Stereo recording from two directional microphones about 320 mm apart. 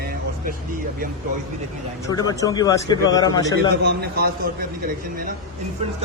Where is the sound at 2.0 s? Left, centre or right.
Centre.